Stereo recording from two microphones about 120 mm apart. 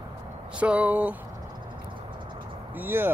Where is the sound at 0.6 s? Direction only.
10° right (ahead or behind).